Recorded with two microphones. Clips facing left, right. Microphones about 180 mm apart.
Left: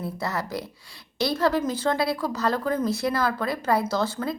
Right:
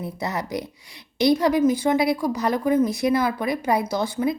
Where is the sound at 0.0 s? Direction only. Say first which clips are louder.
Right 1 dB; 20° right (ahead or behind).